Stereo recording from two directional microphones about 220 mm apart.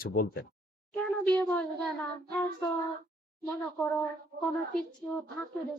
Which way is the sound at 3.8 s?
5° left (ahead or behind).